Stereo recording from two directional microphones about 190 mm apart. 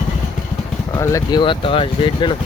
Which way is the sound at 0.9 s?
15° left (ahead or behind).